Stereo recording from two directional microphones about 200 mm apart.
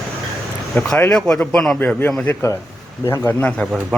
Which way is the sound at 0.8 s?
10° left (ahead or behind).